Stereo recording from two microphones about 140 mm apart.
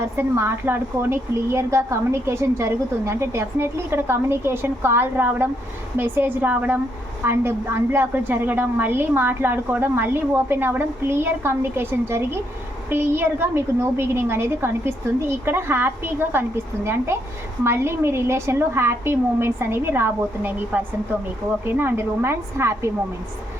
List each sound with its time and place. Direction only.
0.0 s speech: 20° right (ahead or behind)